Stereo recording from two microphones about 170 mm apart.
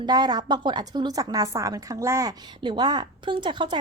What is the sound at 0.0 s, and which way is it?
A woman's voice, 25° right (ahead or behind).